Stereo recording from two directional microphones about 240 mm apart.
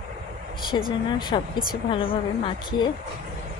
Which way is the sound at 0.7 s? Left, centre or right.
Centre.